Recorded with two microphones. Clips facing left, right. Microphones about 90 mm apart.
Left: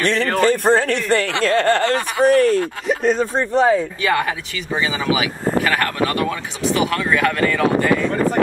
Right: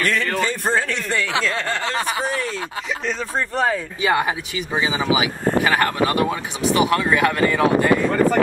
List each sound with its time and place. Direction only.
0.0 s speech: 30° left (ahead or behind)
0.3 s speech: 55° left (ahead or behind)
3.3 s speech: 20° left (ahead or behind)
4.0 s speech: 15° right (ahead or behind)